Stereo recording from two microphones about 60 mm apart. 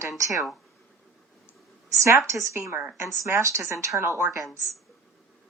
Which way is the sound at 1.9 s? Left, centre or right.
Right.